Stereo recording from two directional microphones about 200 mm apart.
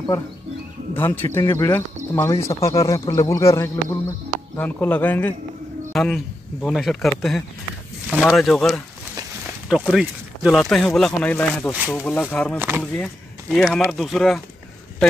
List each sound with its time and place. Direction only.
0.9 s a man's voice: 10° left (ahead or behind)
12.5 s speech: 10° right (ahead or behind)
12.9 s speech: 5° left (ahead or behind)